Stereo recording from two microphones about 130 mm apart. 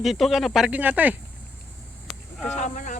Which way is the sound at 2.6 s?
75° left (ahead or behind).